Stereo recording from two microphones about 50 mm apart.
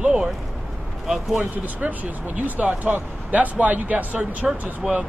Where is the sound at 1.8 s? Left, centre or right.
Right.